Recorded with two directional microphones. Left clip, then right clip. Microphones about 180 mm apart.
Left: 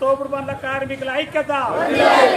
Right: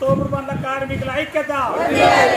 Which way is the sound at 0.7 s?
5° left (ahead or behind).